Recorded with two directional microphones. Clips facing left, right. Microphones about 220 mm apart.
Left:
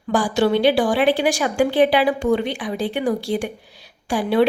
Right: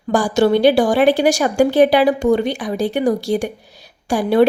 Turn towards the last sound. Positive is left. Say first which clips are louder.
# right 4 dB
turn(degrees=-45)  # may be behind; listen again after turning